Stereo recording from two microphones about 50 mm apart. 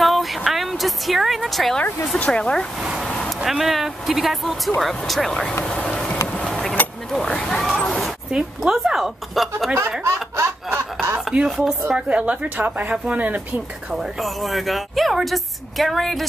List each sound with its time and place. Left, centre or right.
0.0 s vehicle: centre
0.4 s a woman's voice: centre
2.1 s speech: left
2.8 s a woman's voice: centre
5.7 s a sound: centre
6.4 s vehicle: centre
7.4 s a sound: centre
8.3 s a woman's voice: centre
10.0 s laughter: right
11.4 s a woman's voice: centre
12.1 s speech: right
12.9 s speech: right
13.9 s a woman's voice: centre